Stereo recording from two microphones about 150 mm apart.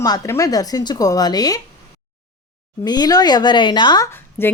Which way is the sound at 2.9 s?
25° left (ahead or behind).